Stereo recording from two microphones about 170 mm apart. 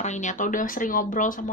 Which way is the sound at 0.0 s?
45° left (ahead or behind).